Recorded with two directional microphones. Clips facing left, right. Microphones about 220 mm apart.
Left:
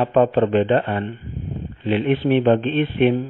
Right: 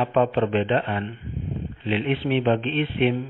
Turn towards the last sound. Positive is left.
turn(degrees=50)  # may be behind; listen again after turning